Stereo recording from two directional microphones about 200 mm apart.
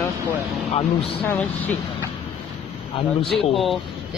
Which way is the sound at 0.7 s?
30° left (ahead or behind).